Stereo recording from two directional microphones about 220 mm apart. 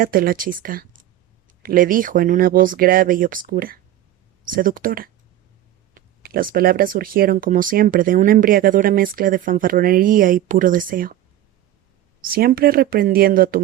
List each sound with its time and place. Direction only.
0.0 s speech: 40° right (ahead or behind)
12.2 s speech: 40° right (ahead or behind)